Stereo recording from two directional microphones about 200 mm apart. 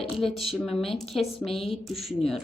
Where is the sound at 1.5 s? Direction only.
30° left (ahead or behind).